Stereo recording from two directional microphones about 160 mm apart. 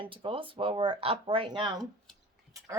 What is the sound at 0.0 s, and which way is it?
A woman's voice, 35° right (ahead or behind).